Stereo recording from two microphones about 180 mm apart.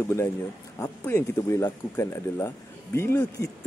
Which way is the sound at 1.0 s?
15° left (ahead or behind).